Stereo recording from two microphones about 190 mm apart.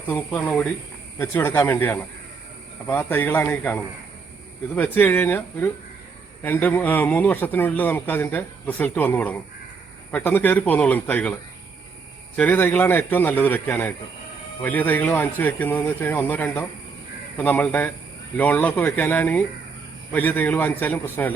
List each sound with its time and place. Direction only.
0.1 s speech: 10° left (ahead or behind)
12.4 s speech: 10° left (ahead or behind)